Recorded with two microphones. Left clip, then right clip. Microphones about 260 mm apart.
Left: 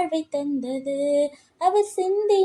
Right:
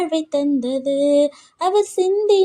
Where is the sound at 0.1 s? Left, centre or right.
Right.